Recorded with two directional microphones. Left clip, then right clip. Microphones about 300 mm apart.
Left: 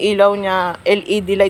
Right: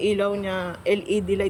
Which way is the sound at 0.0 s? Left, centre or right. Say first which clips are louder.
Left 10 dB; centre.